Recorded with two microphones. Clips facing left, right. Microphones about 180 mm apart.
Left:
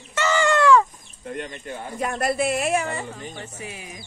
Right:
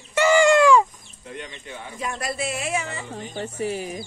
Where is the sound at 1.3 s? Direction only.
50° left (ahead or behind).